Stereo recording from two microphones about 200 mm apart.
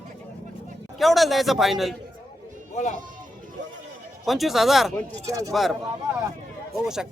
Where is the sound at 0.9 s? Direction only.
Centre (ahead or behind).